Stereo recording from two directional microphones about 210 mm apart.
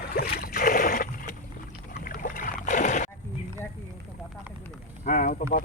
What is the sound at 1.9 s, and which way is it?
Boat, 40° left (ahead or behind).